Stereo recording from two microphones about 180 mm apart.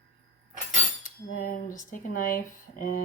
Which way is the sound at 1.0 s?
50° left (ahead or behind).